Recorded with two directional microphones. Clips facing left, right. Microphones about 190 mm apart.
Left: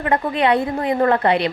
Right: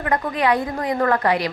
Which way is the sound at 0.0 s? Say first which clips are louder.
Left 2 dB; 25° left (ahead or behind).